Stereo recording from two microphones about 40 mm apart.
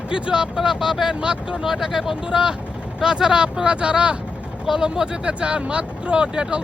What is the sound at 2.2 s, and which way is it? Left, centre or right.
Speech, centre.